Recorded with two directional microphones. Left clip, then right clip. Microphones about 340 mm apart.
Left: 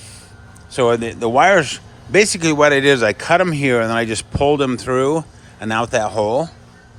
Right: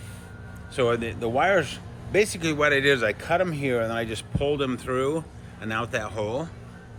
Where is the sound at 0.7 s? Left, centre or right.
Centre.